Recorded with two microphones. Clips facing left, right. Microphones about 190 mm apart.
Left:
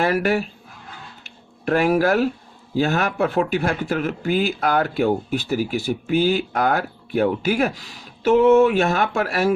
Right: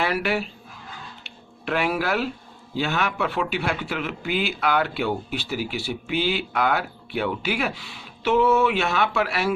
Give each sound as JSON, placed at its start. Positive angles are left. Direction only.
{"t": 0.0, "sound": "speech", "side_deg": 45}
{"t": 1.2, "sound": "a sound", "side_deg": 45}
{"t": 2.7, "sound": "speech", "side_deg": 45}